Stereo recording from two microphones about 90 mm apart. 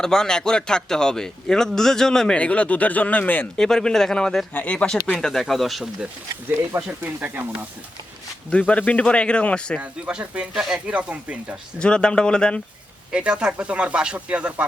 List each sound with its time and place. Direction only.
0.0 s a man's voice: 5° left (ahead or behind)
3.6 s a man's voice: 5° left (ahead or behind)
7.0 s speech: 20° right (ahead or behind)
8.4 s a man's voice: 15° left (ahead or behind)
9.8 s speech: 15° right (ahead or behind)
11.8 s a man's voice: 10° left (ahead or behind)
13.1 s speech: 10° right (ahead or behind)